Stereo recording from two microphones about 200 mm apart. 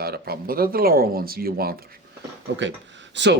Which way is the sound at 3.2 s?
65° right (ahead or behind).